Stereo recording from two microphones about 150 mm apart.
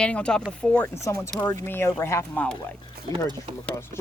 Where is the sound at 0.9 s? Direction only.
20° left (ahead or behind).